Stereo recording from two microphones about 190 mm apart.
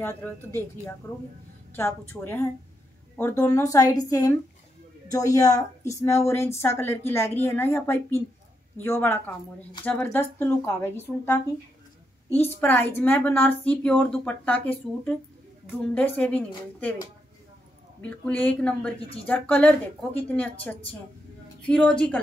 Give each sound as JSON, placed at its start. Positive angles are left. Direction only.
{"t": 0.0, "sound": "a woman's voice", "side_deg": 10}
{"t": 18.0, "sound": "a woman's voice", "side_deg": 10}